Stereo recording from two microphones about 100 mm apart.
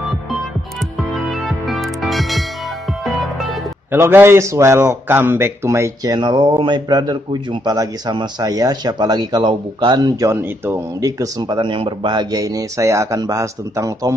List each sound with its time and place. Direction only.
1.1 s music: centre (ahead or behind)
3.9 s a man's voice: 25° right (ahead or behind)
6.1 s a man's voice: 50° right (ahead or behind)
10.3 s a man's voice: 20° right (ahead or behind)
11.0 s speech: 35° right (ahead or behind)